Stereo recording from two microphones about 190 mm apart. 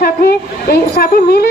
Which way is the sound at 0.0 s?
55° left (ahead or behind).